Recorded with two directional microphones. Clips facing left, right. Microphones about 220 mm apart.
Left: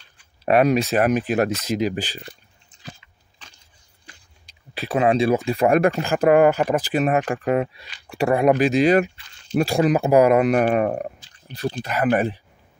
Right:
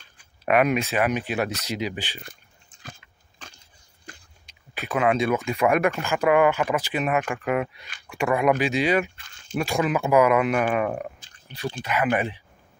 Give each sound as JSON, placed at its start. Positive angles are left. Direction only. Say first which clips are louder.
{"t": 0.5, "sound": "speech", "louder": "left 4 dB", "side_deg": 35}
{"t": 2.2, "sound": "biting", "louder": "left 4 dB", "side_deg": -50}
{"t": 4.1, "sound": "a sound", "louder": "right 5 dB", "side_deg": -45}
{"t": 4.5, "sound": "speech", "louder": "left 4 dB", "side_deg": 35}
{"t": 9.1, "sound": "a sound", "louder": "left 7 dB", "side_deg": -50}
{"t": 9.6, "sound": "speech", "louder": "left 5 dB", "side_deg": 35}